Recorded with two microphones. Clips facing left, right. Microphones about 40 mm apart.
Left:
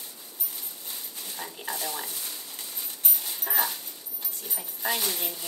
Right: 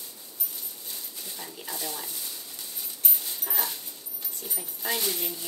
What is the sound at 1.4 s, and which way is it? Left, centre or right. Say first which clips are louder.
Speech: left 4 dB; left.